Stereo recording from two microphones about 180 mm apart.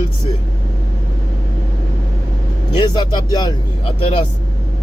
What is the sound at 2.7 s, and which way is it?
Speech, 25° left (ahead or behind).